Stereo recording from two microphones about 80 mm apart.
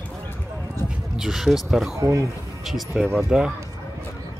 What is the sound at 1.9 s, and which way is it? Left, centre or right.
Speech, right.